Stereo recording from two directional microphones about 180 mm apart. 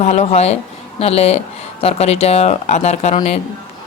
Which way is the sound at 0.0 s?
35° left (ahead or behind).